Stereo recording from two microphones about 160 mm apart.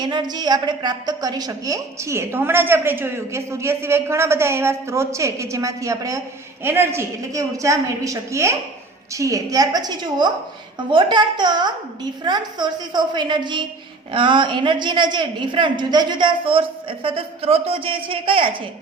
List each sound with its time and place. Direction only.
0.0 s a woman's voice: 25° right (ahead or behind)